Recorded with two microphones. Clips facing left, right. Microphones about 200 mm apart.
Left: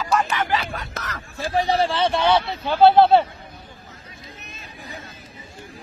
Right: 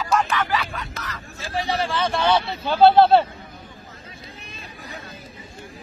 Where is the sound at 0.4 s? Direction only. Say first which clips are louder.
Left 1 dB; 25° left (ahead or behind).